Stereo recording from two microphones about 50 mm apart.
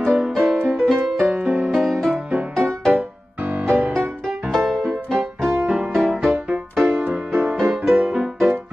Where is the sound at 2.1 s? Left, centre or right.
Right.